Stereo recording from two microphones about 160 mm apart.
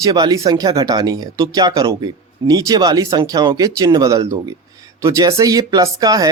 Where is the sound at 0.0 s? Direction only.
25° right (ahead or behind).